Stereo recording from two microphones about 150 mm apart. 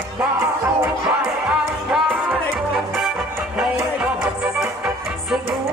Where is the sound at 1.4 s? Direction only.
Centre (ahead or behind).